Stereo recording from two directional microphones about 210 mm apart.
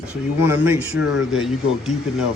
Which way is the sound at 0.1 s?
10° right (ahead or behind).